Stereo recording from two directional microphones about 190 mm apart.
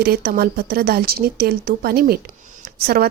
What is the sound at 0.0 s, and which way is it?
A woman's voice, 55° right (ahead or behind).